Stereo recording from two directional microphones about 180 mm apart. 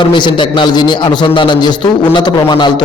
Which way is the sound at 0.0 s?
25° left (ahead or behind).